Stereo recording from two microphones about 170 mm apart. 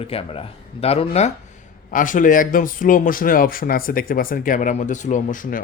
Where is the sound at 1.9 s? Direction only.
50° left (ahead or behind).